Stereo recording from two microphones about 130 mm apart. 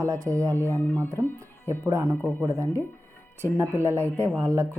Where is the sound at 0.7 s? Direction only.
15° left (ahead or behind).